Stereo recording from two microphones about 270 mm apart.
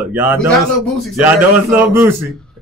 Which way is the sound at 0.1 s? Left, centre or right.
Centre.